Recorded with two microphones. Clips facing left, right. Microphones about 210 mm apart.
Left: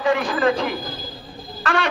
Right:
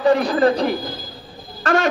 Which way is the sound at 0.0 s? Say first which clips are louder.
Right 4 dB; 40° right (ahead or behind).